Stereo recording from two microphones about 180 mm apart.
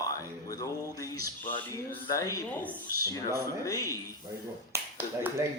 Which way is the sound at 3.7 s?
20° left (ahead or behind).